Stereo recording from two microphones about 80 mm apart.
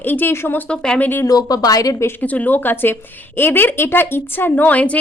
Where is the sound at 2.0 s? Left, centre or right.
Left.